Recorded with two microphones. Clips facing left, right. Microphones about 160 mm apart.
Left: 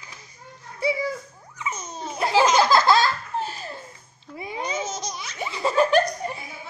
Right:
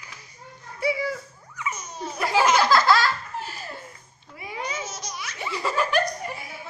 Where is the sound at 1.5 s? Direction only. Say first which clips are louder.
Even; 25° left (ahead or behind).